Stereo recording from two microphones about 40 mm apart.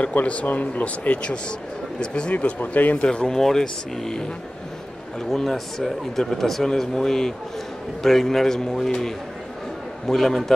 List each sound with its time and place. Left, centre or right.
0.0 s speech: left
2.3 s speech: left
3.1 s speech: centre
3.3 s speech: centre
5.3 s speech: centre